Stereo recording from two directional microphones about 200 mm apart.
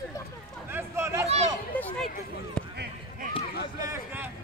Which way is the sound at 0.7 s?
10° right (ahead or behind).